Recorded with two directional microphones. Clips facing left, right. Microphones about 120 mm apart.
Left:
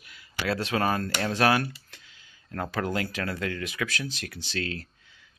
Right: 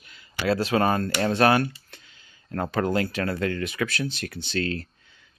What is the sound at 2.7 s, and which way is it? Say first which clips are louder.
Speech: right 5 dB; centre (ahead or behind).